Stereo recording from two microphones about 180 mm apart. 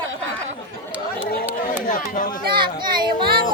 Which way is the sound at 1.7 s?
50° left (ahead or behind).